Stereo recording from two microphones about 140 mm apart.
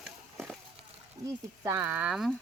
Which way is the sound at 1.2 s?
25° right (ahead or behind).